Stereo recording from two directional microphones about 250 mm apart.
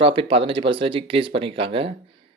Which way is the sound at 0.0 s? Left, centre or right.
Right.